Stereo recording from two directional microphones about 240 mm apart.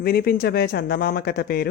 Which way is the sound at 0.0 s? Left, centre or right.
Left.